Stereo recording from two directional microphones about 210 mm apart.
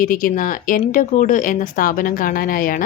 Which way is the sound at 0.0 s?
40° left (ahead or behind).